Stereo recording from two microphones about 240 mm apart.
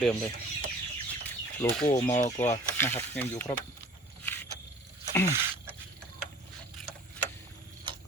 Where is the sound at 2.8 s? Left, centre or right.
Centre.